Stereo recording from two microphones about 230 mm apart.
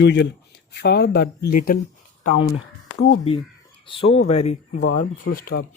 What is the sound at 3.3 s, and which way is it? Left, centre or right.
Speech, left.